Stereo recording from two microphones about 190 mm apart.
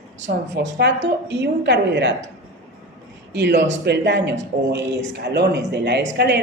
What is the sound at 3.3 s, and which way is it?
A woman's voice, 65° right (ahead or behind).